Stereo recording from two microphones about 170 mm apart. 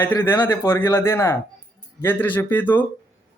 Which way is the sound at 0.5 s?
15° left (ahead or behind).